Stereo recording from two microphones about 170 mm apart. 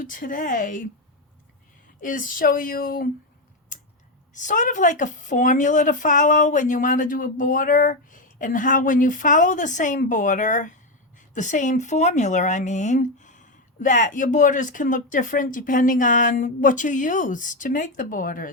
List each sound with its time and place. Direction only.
0.0 s a woman's voice: 55° left (ahead or behind)
2.0 s speech: 55° left (ahead or behind)
4.4 s a woman's voice: 50° left (ahead or behind)